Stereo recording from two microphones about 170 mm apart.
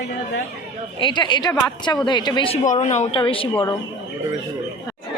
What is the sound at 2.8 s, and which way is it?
Speech, 40° left (ahead or behind).